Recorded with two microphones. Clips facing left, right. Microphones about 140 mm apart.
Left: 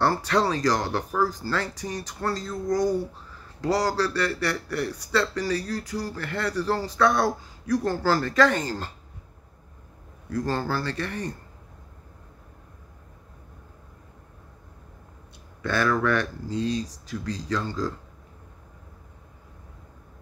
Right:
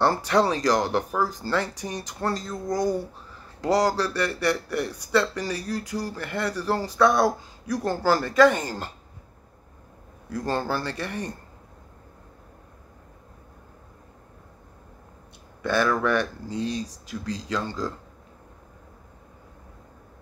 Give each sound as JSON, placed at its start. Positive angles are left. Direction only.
{"t": 0.0, "sound": "speech", "side_deg": -15}
{"t": 10.4, "sound": "speech", "side_deg": -20}
{"t": 15.6, "sound": "speech", "side_deg": -10}